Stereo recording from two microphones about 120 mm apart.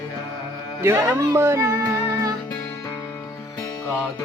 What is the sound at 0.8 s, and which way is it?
Music, 25° right (ahead or behind).